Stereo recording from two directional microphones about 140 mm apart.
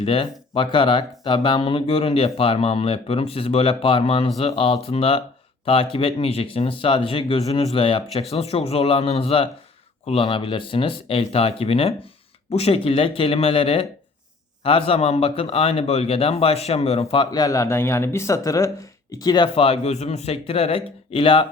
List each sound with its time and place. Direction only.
0.0 s speech: 40° left (ahead or behind)
19.5 s speech: 45° left (ahead or behind)